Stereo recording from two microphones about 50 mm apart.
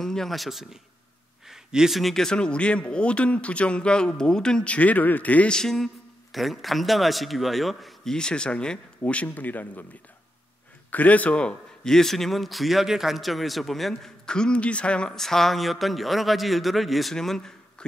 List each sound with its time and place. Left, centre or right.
0.0 s a man's voice: centre
1.5 s a sound: centre
2.0 s speech: centre
2.2 s speech: centre
4.6 s speech: left
5.5 s music: centre
6.3 s speech: centre
8.1 s speech: centre
9.3 s speech: left
10.9 s a man's voice: left
11.9 s speech: centre
14.2 s speech: centre
15.1 s speech: centre